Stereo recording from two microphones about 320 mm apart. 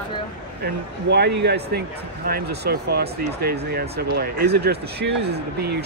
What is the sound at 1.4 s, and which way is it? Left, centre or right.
Speech, right.